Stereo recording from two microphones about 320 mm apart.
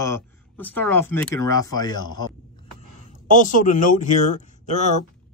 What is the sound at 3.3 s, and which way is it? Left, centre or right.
Speech, left.